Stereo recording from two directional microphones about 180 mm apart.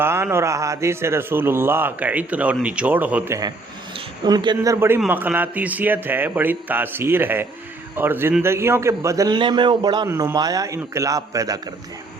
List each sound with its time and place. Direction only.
0.0 s a man's voice: 15° right (ahead or behind)
3.9 s a sound: 25° right (ahead or behind)
4.5 s a man's voice: 15° right (ahead or behind)